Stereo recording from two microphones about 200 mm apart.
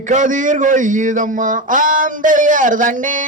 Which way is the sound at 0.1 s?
40° right (ahead or behind).